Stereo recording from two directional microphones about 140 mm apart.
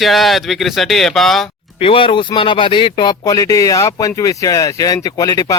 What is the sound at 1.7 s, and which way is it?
Speech, 40° left (ahead or behind).